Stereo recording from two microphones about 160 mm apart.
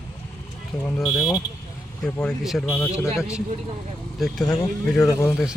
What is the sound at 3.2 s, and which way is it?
Speech, 5° right (ahead or behind).